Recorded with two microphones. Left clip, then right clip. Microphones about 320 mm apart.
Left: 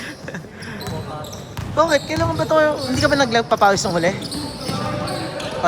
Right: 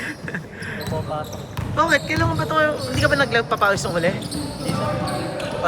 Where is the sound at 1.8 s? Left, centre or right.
Centre.